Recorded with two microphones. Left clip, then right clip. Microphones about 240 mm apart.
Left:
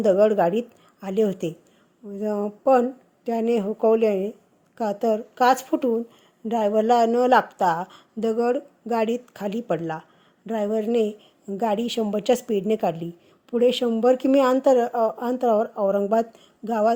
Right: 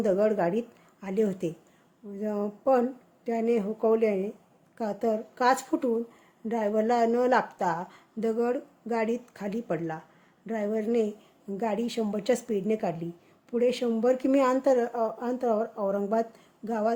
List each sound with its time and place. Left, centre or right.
0.0 s a woman's voice: centre